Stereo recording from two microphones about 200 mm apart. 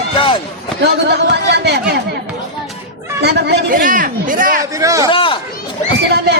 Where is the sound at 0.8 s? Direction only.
55° right (ahead or behind).